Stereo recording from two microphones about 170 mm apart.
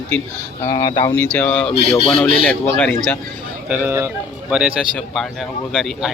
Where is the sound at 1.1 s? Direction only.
10° left (ahead or behind).